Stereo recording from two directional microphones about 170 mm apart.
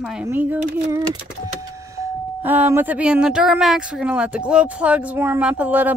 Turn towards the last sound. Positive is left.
turn(degrees=-10)  # may be behind; listen again after turning